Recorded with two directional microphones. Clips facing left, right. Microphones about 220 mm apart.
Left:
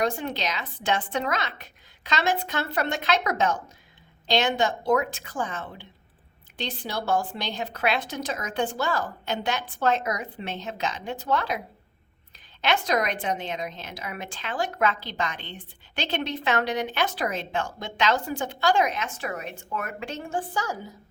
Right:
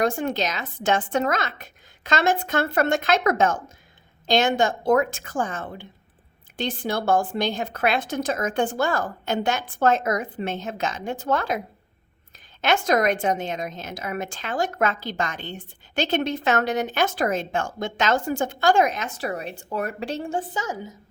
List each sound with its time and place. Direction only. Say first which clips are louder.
0.0 s a woman's voice: right 4 dB; 50° right (ahead or behind)
12.6 s a woman's voice: right 4 dB; 50° right (ahead or behind)
20.5 s a woman's voice: right 1 dB; 20° right (ahead or behind)